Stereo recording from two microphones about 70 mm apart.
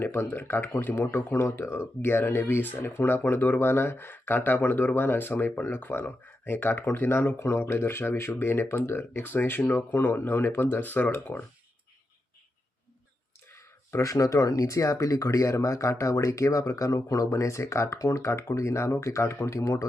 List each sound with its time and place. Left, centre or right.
0.0 s speech: left
11.1 s speech: left
13.6 s speech: left